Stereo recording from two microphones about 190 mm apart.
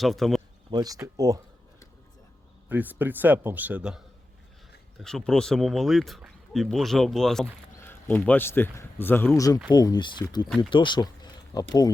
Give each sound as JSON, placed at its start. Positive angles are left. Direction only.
{"t": 0.0, "sound": "speech", "side_deg": 0}
{"t": 0.7, "sound": "a man's voice", "side_deg": -20}
{"t": 2.6, "sound": "a man's voice", "side_deg": -10}